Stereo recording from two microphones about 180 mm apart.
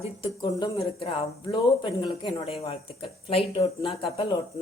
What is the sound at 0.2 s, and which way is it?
Speech, 25° left (ahead or behind).